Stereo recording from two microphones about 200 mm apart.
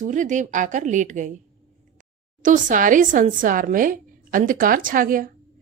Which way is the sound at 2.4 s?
40° right (ahead or behind).